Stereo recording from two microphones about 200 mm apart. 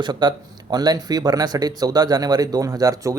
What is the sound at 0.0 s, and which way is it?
Speech, 20° right (ahead or behind).